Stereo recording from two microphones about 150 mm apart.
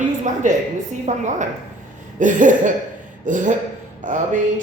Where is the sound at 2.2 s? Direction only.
60° right (ahead or behind).